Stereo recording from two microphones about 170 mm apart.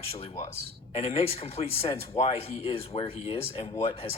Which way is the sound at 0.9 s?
35° left (ahead or behind).